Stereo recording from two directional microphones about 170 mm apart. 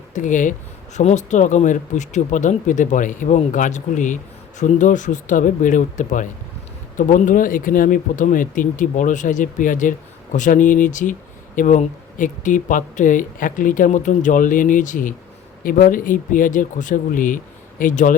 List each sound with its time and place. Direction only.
0.1 s speech: 50° left (ahead or behind)